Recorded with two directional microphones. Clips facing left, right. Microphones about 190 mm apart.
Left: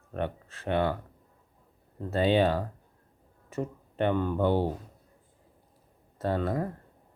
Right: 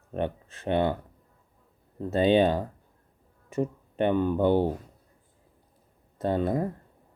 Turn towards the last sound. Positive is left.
turn(degrees=-20)  # may be behind; listen again after turning